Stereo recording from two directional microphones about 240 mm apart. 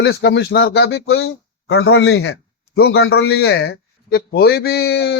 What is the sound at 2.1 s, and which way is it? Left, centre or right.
Speech, left.